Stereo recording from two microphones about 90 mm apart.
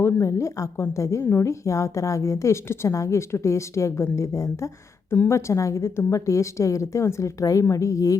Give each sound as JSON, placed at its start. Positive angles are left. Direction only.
{"t": 0.0, "sound": "a woman's voice", "side_deg": 35}